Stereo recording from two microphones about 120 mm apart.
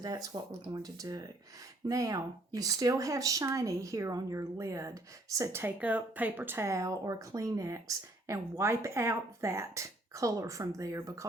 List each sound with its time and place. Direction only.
0.0 s speech: 30° right (ahead or behind)